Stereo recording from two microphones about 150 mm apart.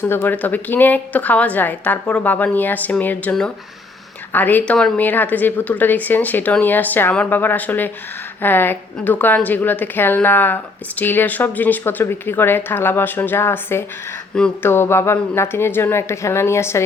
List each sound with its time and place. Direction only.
0.0 s a woman's voice: 15° left (ahead or behind)